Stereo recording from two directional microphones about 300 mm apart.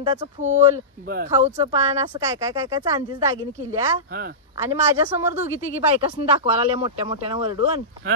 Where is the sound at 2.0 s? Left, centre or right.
Centre.